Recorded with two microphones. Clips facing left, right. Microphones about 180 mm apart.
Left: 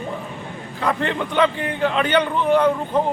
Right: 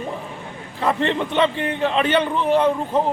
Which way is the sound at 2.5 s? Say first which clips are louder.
Even; 30° right (ahead or behind).